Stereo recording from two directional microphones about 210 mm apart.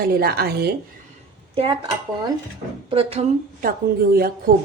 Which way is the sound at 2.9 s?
30° right (ahead or behind).